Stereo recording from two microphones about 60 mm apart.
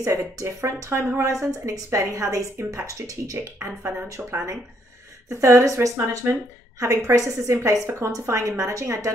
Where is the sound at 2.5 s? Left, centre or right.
Right.